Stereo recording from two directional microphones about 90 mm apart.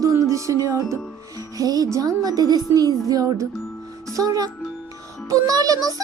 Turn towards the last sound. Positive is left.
turn(degrees=-40)  # may be behind; listen again after turning